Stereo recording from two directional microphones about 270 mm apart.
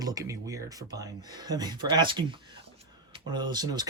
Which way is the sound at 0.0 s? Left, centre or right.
Centre.